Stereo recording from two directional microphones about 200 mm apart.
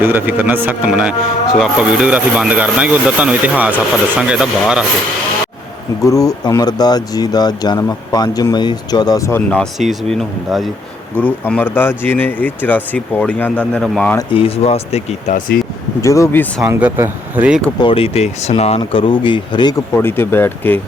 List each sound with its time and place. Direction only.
0.0 s speech: 10° right (ahead or behind)
6.1 s speech: 15° left (ahead or behind)
14.2 s speech: 25° left (ahead or behind)
16.0 s speech: 15° left (ahead or behind)
16.6 s speech: 10° right (ahead or behind)
17.7 s speech: 25° left (ahead or behind); by 20.8 s 10° left (ahead or behind)